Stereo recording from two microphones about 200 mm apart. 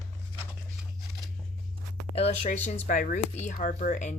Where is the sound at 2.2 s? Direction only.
35° left (ahead or behind).